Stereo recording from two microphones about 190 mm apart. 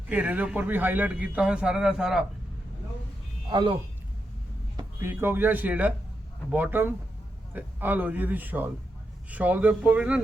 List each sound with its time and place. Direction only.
0.1 s a man's voice: 10° right (ahead or behind)
3.5 s speech: 25° right (ahead or behind)
4.8 s a man's voice: 15° right (ahead or behind)